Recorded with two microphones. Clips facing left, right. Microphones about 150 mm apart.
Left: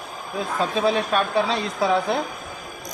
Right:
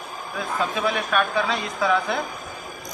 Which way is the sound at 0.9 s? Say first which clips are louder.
Left 2 dB; 30° left (ahead or behind).